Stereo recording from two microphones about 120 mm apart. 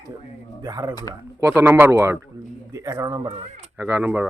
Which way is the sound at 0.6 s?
35° right (ahead or behind).